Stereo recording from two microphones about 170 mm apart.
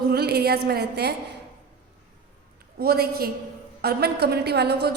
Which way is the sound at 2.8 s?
65° right (ahead or behind).